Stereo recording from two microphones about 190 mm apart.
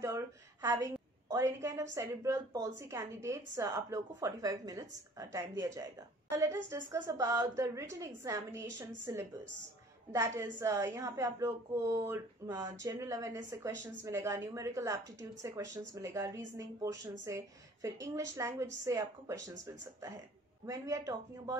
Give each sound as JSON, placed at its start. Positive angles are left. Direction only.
{"t": 0.0, "sound": "a woman's voice", "side_deg": -20}
{"t": 20.6, "sound": "a woman's voice", "side_deg": -15}